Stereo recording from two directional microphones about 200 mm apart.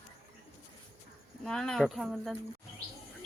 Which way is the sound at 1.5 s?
5° left (ahead or behind).